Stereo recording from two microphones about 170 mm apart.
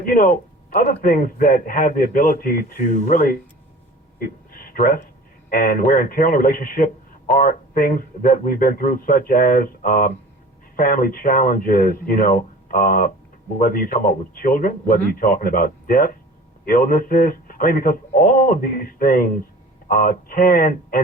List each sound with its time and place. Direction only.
0.0 s a man's voice: 55° left (ahead or behind)
4.2 s a sound: 55° left (ahead or behind)
5.5 s a man's voice: 55° left (ahead or behind)